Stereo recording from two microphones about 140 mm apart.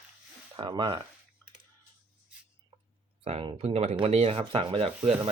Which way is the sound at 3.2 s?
45° right (ahead or behind).